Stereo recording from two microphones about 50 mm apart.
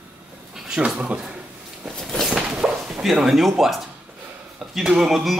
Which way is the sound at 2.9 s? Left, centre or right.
Centre.